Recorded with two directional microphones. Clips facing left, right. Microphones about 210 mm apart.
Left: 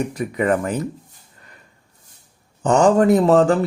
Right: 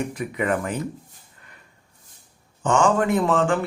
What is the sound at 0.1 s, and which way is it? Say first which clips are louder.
Speech: left 5 dB; 40° left (ahead or behind).